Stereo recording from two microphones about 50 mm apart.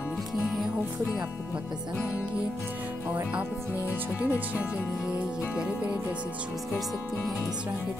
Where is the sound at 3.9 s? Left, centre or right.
Right.